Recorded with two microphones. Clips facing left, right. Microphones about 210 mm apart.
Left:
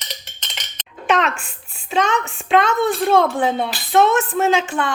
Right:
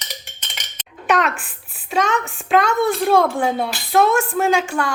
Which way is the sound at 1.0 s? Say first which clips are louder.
Even; centre (ahead or behind).